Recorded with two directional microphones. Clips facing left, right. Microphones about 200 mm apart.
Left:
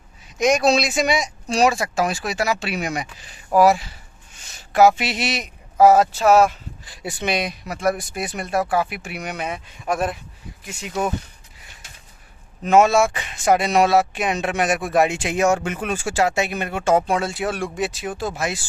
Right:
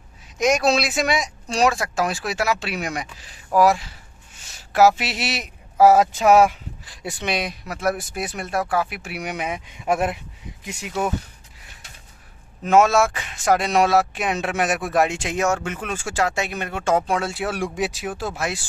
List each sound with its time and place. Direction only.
0.4 s speech: centre (ahead or behind)
6.9 s speech: 5° left (ahead or behind); by 10.1 s 20° right (ahead or behind)
10.6 s speech: 10° right (ahead or behind)
12.6 s speech: centre (ahead or behind)